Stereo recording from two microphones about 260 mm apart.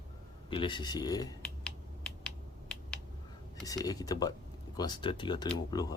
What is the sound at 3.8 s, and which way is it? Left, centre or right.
Speech, centre.